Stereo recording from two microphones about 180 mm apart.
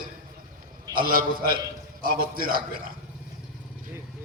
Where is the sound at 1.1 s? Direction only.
55° right (ahead or behind).